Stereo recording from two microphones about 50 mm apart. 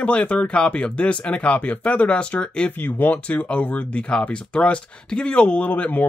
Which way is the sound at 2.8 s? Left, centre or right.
Left.